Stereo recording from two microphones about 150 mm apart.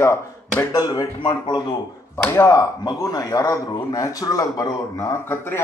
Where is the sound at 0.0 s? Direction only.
20° left (ahead or behind).